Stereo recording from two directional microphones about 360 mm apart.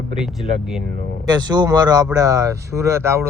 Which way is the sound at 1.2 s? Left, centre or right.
Centre.